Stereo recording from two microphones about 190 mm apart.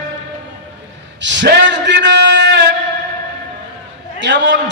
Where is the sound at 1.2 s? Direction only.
70° right (ahead or behind).